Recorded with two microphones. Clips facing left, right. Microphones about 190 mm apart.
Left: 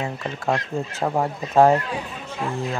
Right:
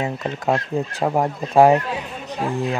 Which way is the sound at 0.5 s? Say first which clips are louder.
Right 3 dB; 15° right (ahead or behind).